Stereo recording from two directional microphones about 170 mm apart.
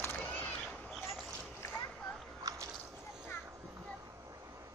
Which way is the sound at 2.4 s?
20° right (ahead or behind).